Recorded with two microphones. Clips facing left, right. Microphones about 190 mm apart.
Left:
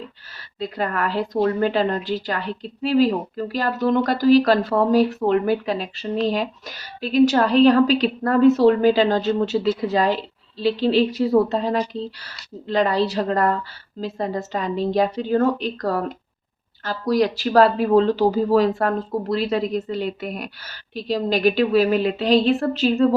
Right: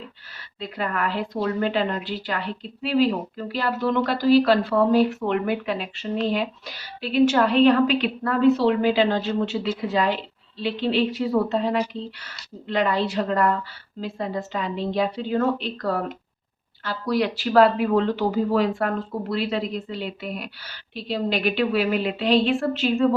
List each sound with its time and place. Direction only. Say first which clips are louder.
0.6 s a woman's voice: left 3 dB; 40° left (ahead or behind)